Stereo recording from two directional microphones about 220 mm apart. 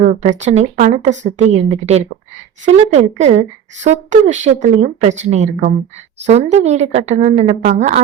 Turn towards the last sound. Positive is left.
turn(degrees=-30)  # may be behind; listen again after turning